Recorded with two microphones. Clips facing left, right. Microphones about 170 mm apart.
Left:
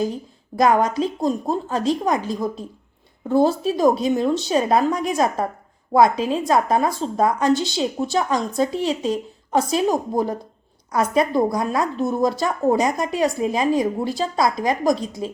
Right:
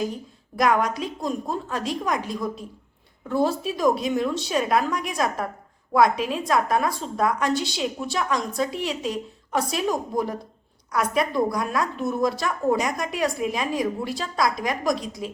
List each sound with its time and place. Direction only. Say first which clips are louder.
0.5 s a woman's voice: left 4 dB; 30° left (ahead or behind)